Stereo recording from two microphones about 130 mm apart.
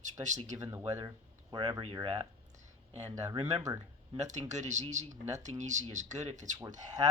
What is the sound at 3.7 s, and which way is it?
Speech, 30° right (ahead or behind).